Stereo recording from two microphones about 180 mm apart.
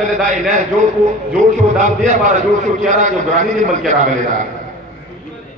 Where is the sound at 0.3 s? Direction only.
45° right (ahead or behind).